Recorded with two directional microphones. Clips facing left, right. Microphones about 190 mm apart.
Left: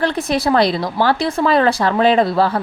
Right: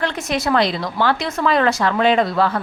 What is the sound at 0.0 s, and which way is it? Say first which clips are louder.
Speech: left 4 dB; 35° left (ahead or behind).